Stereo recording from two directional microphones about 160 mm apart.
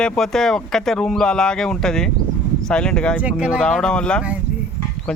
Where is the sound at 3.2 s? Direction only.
10° right (ahead or behind).